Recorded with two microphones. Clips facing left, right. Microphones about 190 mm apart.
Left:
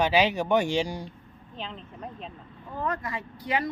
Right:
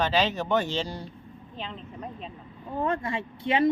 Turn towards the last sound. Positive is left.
turn(degrees=-25)  # may be behind; listen again after turning